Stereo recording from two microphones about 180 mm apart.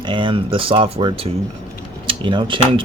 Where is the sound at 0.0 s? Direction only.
25° right (ahead or behind).